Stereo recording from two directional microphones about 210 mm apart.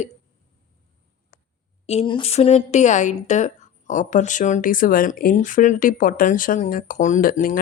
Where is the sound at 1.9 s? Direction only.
25° left (ahead or behind).